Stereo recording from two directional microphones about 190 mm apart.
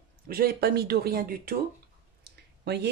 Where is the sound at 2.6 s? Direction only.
60° right (ahead or behind).